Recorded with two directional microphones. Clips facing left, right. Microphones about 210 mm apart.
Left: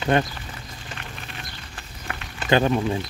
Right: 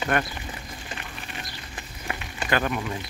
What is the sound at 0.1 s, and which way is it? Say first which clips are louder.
Speech: left 5 dB; 25° left (ahead or behind).